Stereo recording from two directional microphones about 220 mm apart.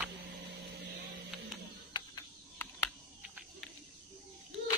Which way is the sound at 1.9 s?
15° left (ahead or behind).